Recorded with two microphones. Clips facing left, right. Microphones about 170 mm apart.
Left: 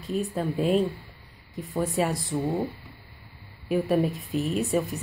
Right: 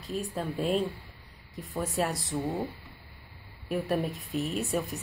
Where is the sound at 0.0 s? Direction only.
Centre (ahead or behind).